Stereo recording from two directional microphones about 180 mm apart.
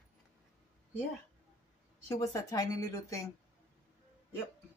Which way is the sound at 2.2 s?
20° left (ahead or behind).